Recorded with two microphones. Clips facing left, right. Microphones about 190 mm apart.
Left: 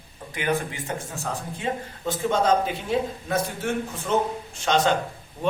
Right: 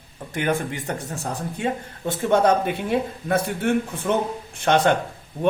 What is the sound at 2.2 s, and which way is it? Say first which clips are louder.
Speech: right 3 dB; 60° right (ahead or behind).